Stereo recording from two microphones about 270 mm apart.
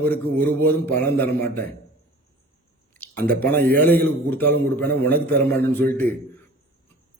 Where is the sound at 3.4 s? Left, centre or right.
Right.